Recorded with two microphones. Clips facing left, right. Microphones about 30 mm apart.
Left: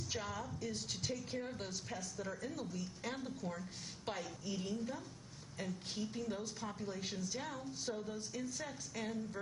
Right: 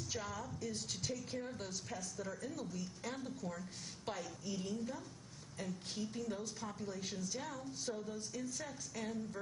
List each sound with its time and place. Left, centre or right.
0.1 s speech: centre
7.9 s a sound: left
8.6 s speech: centre